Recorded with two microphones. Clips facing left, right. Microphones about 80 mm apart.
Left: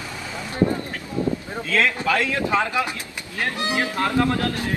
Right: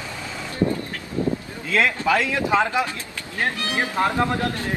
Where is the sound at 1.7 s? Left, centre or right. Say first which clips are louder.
Right 1 dB; centre.